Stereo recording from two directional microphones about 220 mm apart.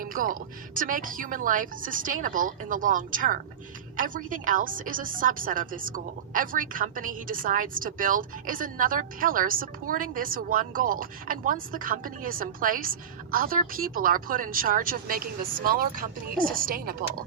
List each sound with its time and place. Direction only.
0.0 s a woman's voice: 40° right (ahead or behind)